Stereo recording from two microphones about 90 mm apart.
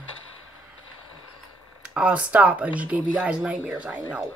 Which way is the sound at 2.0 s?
15° right (ahead or behind).